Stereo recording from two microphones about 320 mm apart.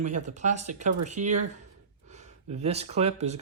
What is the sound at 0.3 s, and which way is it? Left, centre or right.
Speech, right.